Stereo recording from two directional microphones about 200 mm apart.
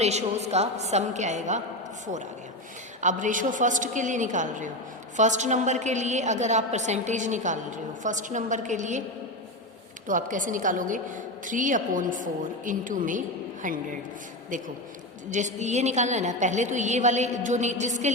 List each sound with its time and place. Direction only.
0.0 s a woman's voice: 35° right (ahead or behind)
3.0 s a woman's voice: 40° right (ahead or behind)
10.1 s a woman's voice: 40° right (ahead or behind)